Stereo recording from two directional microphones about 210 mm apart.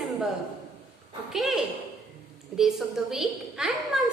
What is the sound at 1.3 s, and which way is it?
A woman's voice, centre (ahead or behind).